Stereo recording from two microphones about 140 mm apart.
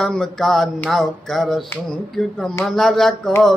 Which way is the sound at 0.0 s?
5° left (ahead or behind).